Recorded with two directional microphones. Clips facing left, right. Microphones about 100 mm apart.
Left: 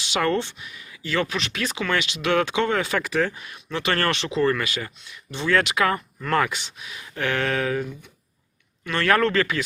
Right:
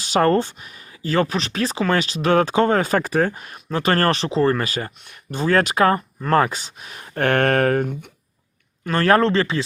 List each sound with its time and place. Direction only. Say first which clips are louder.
0.0 s speech: right 6 dB; 40° right (ahead or behind); by 8.1 s 55° right (ahead or behind)
8.8 s speech: right 4 dB; 40° right (ahead or behind)